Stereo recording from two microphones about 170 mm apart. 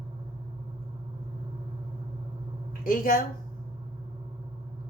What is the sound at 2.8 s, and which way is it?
Speech, 55° left (ahead or behind).